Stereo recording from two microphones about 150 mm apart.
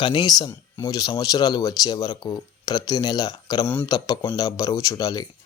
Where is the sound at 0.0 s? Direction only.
30° left (ahead or behind).